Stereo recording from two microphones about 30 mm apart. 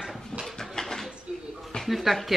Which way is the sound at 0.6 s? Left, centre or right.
Centre.